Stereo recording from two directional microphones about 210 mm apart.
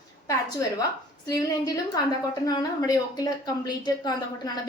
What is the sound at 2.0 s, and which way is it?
A woman's voice, 20° left (ahead or behind).